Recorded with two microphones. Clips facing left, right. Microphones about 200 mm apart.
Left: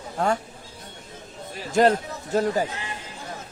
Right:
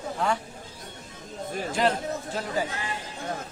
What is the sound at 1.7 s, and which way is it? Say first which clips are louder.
Speech: left 7 dB; 45° left (ahead or behind).